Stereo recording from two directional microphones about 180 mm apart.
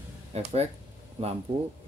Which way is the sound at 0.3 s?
35° right (ahead or behind).